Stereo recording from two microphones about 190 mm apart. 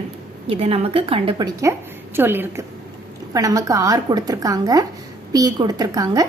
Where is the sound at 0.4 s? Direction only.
30° right (ahead or behind).